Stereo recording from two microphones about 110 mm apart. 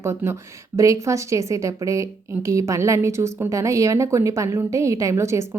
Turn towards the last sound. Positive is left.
turn(degrees=-25)  # may be behind; listen again after turning